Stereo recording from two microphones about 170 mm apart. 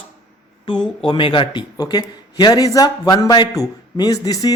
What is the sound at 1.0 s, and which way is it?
A man's voice, 30° left (ahead or behind).